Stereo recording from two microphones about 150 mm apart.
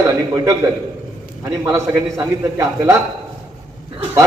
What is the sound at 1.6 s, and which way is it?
A man's voice, 20° right (ahead or behind).